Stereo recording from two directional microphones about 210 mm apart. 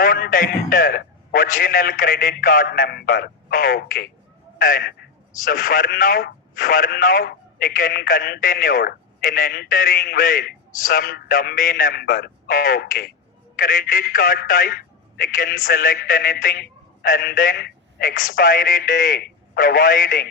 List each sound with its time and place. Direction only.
0.0 s speech: 40° left (ahead or behind)